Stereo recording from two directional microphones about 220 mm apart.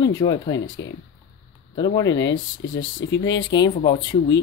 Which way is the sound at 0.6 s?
60° left (ahead or behind).